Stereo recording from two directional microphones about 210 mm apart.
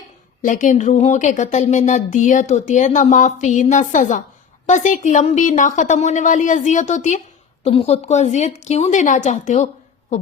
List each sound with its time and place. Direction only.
0.4 s speech: 40° left (ahead or behind)